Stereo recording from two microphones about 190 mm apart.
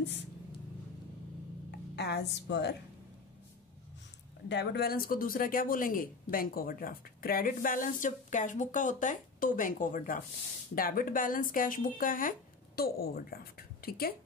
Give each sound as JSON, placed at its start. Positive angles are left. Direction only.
{"t": 0.0, "sound": "speech", "side_deg": 70}
{"t": 2.0, "sound": "a woman's voice", "side_deg": 60}
{"t": 4.5, "sound": "speech", "side_deg": 60}